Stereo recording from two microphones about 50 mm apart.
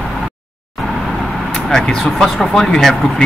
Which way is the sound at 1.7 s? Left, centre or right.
Centre.